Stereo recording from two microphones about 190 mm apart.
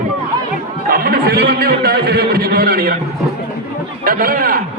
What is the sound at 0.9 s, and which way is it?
A man's voice, 50° right (ahead or behind).